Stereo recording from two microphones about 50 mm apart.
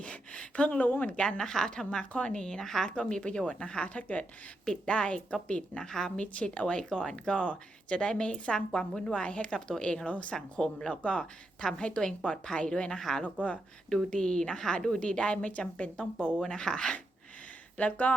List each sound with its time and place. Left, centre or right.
0.0 s speech: left
5.8 s a woman's voice: centre
6.1 s speech: left
10.3 s speech: centre
13.0 s a woman's voice: centre
17.7 s speech: left